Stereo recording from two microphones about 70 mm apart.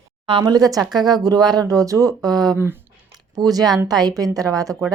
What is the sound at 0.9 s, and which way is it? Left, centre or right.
Speech, right.